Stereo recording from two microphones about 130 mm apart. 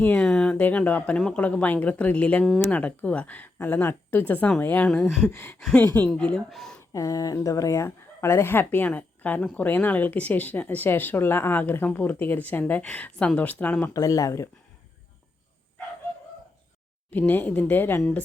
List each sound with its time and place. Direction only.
0.0 s speech: 10° left (ahead or behind)
5.5 s speech: 5° left (ahead or behind)
6.7 s speech: 25° left (ahead or behind)
13.9 s speech: 25° left (ahead or behind)
17.1 s speech: 15° left (ahead or behind)